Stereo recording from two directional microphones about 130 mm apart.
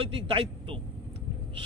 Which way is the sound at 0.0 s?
45° right (ahead or behind).